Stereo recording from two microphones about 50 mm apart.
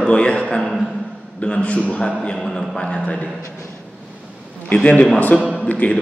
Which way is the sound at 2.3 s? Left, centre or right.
Centre.